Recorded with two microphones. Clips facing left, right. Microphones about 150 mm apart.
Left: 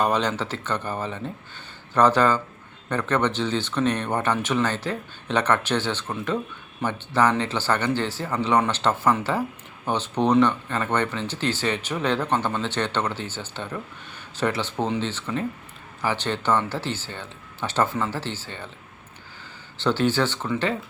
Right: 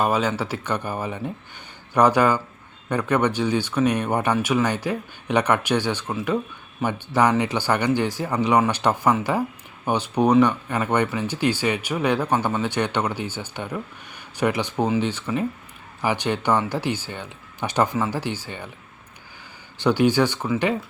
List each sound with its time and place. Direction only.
0.0 s speech: 5° right (ahead or behind)
19.8 s speech: 15° right (ahead or behind)